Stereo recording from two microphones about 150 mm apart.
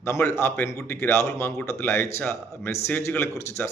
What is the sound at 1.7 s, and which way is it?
A man's voice, 15° left (ahead or behind).